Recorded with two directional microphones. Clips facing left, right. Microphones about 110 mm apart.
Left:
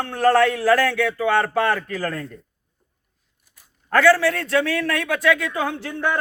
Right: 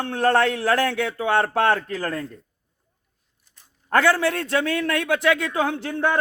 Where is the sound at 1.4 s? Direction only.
25° right (ahead or behind).